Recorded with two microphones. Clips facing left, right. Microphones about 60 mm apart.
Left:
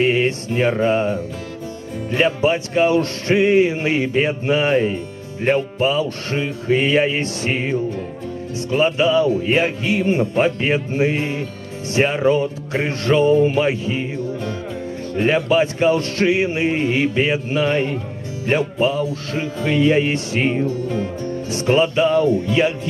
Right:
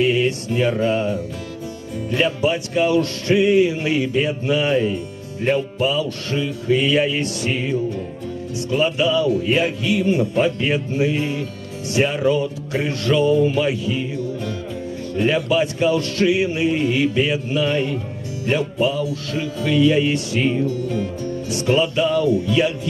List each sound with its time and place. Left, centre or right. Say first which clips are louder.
0.0 s music: left 1 dB; left